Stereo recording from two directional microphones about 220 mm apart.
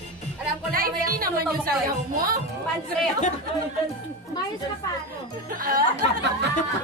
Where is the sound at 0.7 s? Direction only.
40° right (ahead or behind).